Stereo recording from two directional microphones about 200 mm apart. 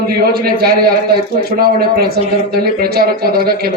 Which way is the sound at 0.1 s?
50° right (ahead or behind).